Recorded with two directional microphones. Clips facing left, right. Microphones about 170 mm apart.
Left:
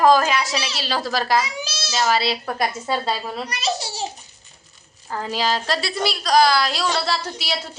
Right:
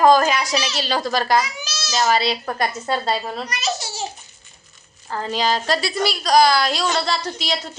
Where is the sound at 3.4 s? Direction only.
30° left (ahead or behind).